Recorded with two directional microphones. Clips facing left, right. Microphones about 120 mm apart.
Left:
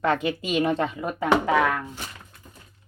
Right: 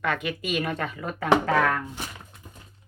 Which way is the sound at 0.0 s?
30° left (ahead or behind).